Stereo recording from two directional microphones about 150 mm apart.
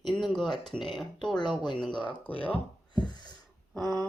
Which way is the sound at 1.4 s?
30° left (ahead or behind).